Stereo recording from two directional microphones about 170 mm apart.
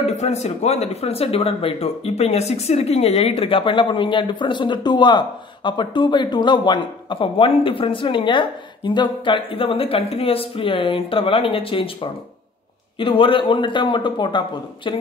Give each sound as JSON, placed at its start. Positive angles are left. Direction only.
{"t": 0.0, "sound": "a man's voice", "side_deg": 40}